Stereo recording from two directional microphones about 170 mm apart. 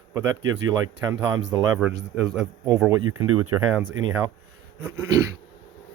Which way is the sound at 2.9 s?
20° right (ahead or behind).